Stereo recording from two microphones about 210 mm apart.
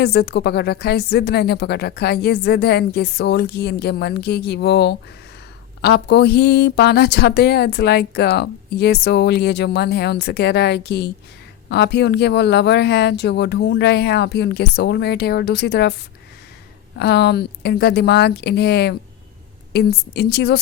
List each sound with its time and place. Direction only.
0.0 s speech: 50° left (ahead or behind)
17.0 s speech: 50° left (ahead or behind)